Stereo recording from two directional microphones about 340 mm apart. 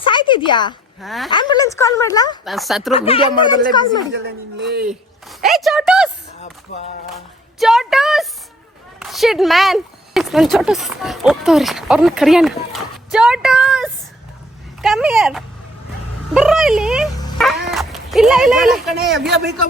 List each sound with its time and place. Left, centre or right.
0.1 s a woman's voice: centre
1.0 s speech: centre
1.3 s speech: centre
2.4 s speech: centre
2.9 s speech: centre
4.1 s speech: right
5.4 s speech: centre
7.6 s a woman's voice: centre
18.9 s a man's voice: right